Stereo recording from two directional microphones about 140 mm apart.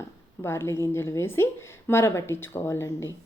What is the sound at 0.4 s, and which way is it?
A woman's voice, 20° left (ahead or behind).